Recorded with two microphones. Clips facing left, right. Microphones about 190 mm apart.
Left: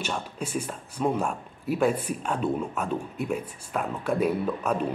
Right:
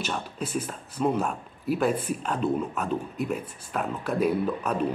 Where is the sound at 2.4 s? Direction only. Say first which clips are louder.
Right 2 dB; 10° left (ahead or behind).